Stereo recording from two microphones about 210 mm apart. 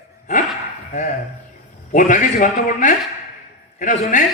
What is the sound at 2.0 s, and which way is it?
A man's voice, 40° left (ahead or behind).